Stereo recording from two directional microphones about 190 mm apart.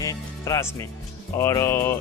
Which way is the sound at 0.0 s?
15° left (ahead or behind).